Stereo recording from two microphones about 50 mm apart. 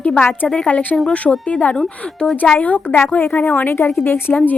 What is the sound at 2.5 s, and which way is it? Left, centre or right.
Speech, left.